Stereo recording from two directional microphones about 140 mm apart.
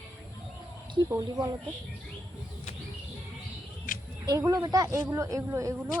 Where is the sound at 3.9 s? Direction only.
80° left.